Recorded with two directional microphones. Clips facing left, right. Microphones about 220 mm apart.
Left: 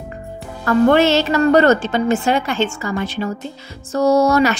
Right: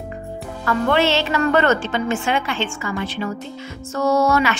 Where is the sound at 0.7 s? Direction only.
45° left (ahead or behind).